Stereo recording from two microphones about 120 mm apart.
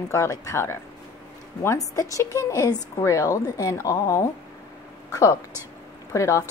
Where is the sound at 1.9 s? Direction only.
30° left (ahead or behind).